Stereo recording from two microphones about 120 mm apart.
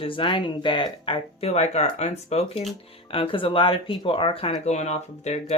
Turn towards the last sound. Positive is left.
turn(degrees=70)  # may be behind; listen again after turning